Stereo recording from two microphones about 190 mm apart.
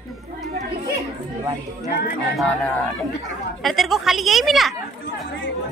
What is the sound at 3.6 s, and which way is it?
A woman's voice, centre (ahead or behind).